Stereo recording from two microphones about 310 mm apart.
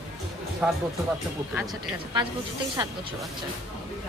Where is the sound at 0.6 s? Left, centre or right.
Centre.